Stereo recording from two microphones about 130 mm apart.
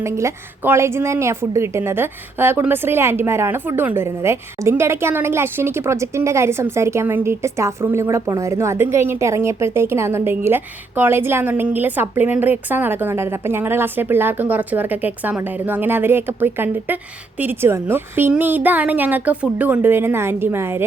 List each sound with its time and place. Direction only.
0.0 s a woman's voice: 20° right (ahead or behind)